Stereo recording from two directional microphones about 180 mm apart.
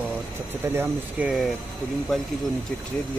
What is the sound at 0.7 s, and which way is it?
Speech, 10° right (ahead or behind).